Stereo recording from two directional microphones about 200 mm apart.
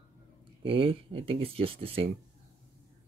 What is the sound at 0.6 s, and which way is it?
Speech, 25° right (ahead or behind).